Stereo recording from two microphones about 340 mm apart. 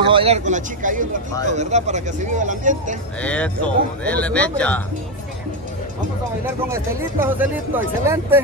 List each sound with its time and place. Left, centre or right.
0.1 s speech: centre
3.2 s speech: centre
6.7 s speech: centre